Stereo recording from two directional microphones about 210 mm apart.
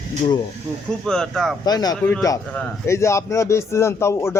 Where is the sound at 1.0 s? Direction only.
5° left (ahead or behind).